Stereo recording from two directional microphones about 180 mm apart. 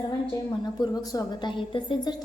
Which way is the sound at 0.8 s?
25° left (ahead or behind).